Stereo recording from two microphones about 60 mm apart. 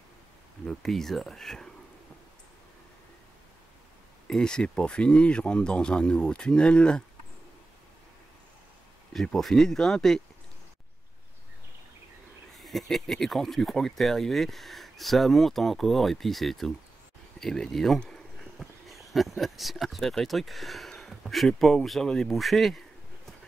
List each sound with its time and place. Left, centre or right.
0.7 s speech: centre
4.3 s speech: centre
9.1 s speech: centre
12.5 s speech: centre